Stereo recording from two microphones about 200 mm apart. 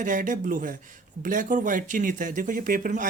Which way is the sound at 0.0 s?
40° right (ahead or behind).